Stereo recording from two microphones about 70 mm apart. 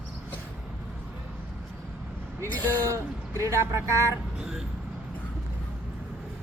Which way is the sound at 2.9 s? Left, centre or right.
Right.